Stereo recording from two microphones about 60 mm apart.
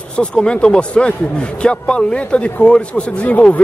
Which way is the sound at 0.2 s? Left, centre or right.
Centre.